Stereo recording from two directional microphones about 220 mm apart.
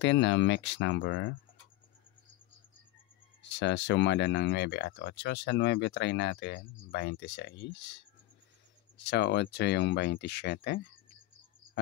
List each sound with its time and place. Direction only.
0.0 s speech: 55° left (ahead or behind)
3.5 s speech: 55° left (ahead or behind)